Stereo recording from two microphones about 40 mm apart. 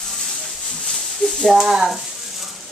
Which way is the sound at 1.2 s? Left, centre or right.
Left.